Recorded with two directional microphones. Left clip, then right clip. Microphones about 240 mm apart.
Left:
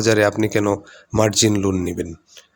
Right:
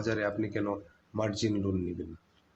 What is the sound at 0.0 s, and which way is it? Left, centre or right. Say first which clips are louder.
Speech: left 15 dB; left.